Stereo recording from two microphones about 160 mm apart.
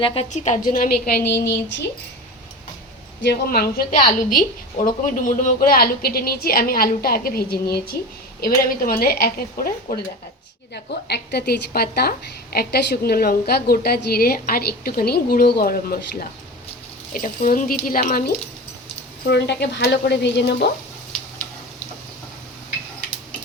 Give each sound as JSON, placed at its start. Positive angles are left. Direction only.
{"t": 0.0, "sound": "a woman's voice", "side_deg": 35}
{"t": 0.3, "sound": "a woman's voice", "side_deg": 50}
{"t": 3.2, "sound": "a woman's voice", "side_deg": 70}
{"t": 8.4, "sound": "a woman's voice", "side_deg": 65}
{"t": 11.1, "sound": "a woman's voice", "side_deg": 85}
{"t": 17.1, "sound": "a woman's voice", "side_deg": 55}
{"t": 19.3, "sound": "speech", "side_deg": 90}